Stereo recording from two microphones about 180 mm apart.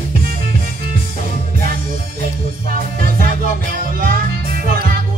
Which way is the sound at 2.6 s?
50° right (ahead or behind).